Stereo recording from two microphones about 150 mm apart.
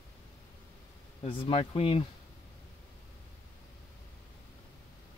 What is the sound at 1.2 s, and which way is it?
Speech, 35° left (ahead or behind).